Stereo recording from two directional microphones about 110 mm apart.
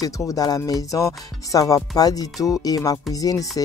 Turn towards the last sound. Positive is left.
turn(degrees=35)  # may be behind; listen again after turning